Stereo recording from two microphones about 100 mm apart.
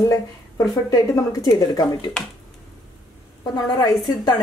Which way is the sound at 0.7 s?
40° left (ahead or behind).